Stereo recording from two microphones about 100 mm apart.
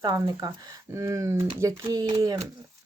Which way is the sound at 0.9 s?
30° right (ahead or behind).